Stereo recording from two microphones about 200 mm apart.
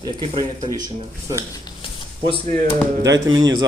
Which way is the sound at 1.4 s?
20° left (ahead or behind).